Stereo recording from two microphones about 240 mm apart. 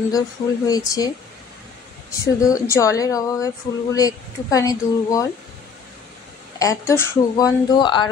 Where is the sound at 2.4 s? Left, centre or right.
Centre.